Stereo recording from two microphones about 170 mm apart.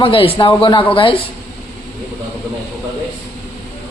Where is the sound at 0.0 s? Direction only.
30° left (ahead or behind).